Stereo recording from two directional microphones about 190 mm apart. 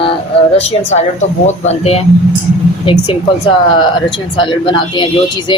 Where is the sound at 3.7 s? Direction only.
25° left (ahead or behind).